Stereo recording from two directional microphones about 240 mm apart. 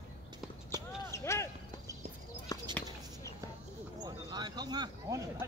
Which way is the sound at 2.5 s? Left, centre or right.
Centre.